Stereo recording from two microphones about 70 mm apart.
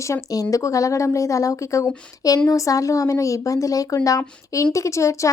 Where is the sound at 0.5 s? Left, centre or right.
Left.